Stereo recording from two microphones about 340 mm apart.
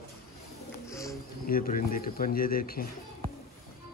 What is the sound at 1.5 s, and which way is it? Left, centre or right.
Speech, left.